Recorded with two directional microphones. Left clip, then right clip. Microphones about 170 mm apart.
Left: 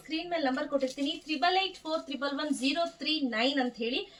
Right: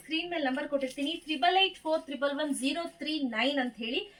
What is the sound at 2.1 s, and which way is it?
A woman's voice, 25° left (ahead or behind).